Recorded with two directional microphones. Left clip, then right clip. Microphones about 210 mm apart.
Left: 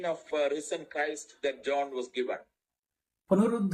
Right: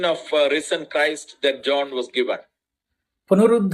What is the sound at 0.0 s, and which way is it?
Speech, 15° right (ahead or behind).